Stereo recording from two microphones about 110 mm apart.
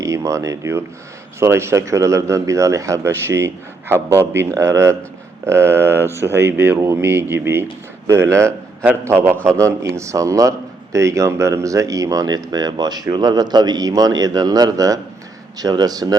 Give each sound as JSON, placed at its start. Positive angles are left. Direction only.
{"t": 0.0, "sound": "speech", "side_deg": -30}